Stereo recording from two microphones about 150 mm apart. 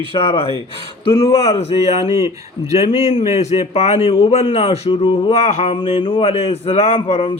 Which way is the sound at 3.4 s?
50° left (ahead or behind).